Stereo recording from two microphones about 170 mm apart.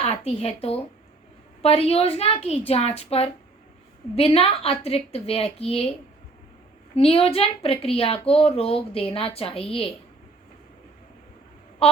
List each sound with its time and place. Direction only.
0.0 s a woman's voice: 35° left (ahead or behind)
6.9 s a woman's voice: 35° left (ahead or behind)
11.8 s a woman's voice: 35° left (ahead or behind)